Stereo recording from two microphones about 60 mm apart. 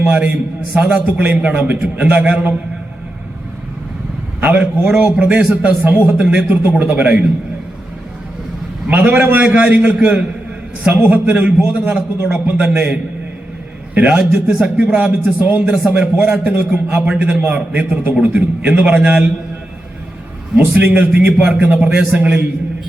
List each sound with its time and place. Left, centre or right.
0.0 s a man's voice: right
4.4 s a man's voice: right
8.9 s a man's voice: right
13.9 s a man's voice: right
14.4 s speech: centre
14.9 s a man's voice: right
20.7 s a man's voice: right